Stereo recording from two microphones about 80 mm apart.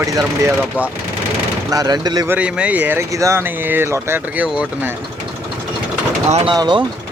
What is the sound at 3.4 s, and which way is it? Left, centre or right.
Speech, right.